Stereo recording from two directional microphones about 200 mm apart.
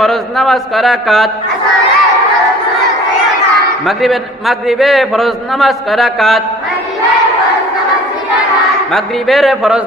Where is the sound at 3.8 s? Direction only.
Centre (ahead or behind).